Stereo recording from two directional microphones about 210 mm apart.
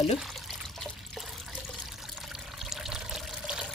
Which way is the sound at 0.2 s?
Centre (ahead or behind).